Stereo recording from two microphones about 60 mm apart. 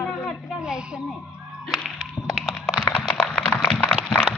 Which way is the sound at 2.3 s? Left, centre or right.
Centre.